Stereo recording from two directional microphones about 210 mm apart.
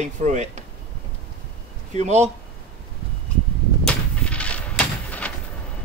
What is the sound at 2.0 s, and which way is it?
Speech, 30° right (ahead or behind).